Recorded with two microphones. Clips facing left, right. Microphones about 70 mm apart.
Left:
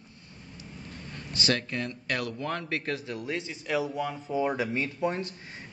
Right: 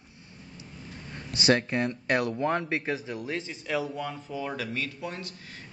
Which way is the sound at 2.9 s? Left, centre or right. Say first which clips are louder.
Even; centre.